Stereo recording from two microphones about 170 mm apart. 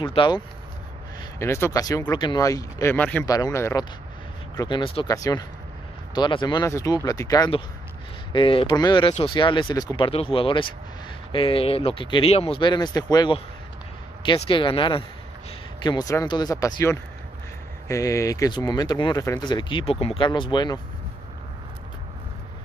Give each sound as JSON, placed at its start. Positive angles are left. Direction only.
{"t": 0.0, "sound": "speech", "side_deg": 30}
{"t": 1.4, "sound": "speech", "side_deg": 15}
{"t": 3.3, "sound": "speech", "side_deg": 20}